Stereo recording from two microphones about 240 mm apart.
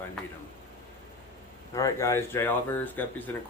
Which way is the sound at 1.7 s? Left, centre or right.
Centre.